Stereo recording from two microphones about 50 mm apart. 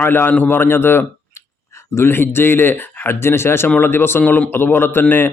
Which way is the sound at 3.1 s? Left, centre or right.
Left.